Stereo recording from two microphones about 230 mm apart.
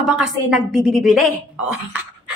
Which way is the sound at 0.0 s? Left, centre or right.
Centre.